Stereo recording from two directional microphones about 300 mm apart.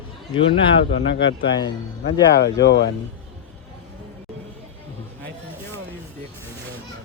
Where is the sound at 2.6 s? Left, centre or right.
Left.